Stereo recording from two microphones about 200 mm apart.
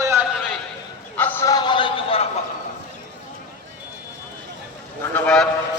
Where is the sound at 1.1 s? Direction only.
10° left (ahead or behind); by 2.2 s 25° left (ahead or behind).